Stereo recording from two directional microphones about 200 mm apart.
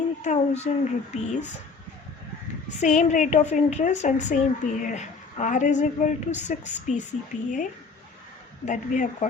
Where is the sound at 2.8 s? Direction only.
35° left (ahead or behind).